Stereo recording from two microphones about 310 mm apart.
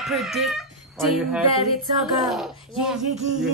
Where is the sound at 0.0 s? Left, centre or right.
Centre.